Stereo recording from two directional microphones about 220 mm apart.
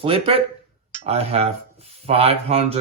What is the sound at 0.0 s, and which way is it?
Speech, 25° right (ahead or behind).